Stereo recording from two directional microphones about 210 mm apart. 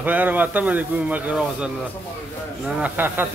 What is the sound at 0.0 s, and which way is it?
A man's voice, 10° right (ahead or behind).